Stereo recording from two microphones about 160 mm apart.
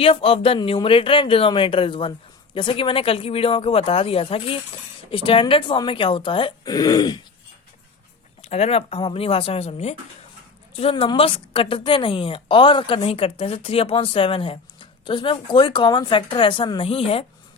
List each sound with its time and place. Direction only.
0.0 s speech: 35° left (ahead or behind)
8.4 s speech: 40° left (ahead or behind)